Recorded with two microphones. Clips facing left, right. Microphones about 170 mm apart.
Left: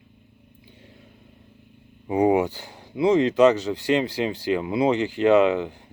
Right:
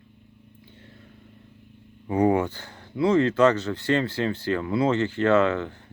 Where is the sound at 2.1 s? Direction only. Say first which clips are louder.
Left 2 dB; 15° left (ahead or behind).